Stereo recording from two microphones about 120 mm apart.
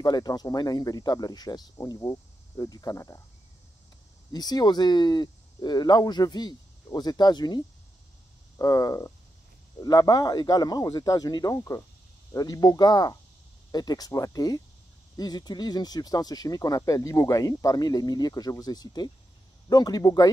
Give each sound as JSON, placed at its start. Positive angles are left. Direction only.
{"t": 0.0, "sound": "speech", "side_deg": 35}
{"t": 4.3, "sound": "speech", "side_deg": 35}